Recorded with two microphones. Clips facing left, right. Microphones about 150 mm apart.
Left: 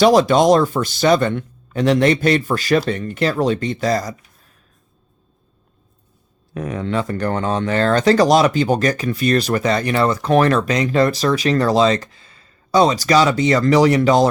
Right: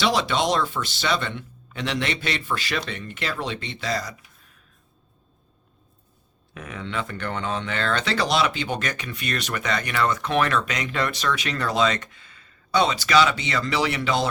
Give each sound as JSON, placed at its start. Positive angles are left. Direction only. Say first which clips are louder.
{"t": 0.0, "sound": "speech", "louder": "left 10 dB", "side_deg": 45}
{"t": 6.5, "sound": "speech", "louder": "left 10 dB", "side_deg": 40}